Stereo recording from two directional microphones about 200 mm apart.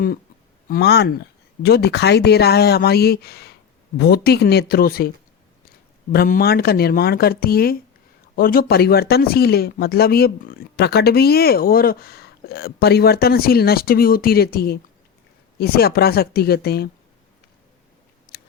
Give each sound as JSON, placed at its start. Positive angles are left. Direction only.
{"t": 0.7, "sound": "speech", "side_deg": 55}